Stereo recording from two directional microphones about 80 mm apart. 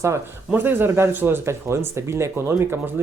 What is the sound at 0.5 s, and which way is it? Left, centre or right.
Speech, right.